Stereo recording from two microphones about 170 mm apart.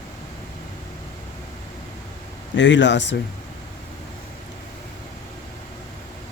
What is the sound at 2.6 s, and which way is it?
Speech, 90° left.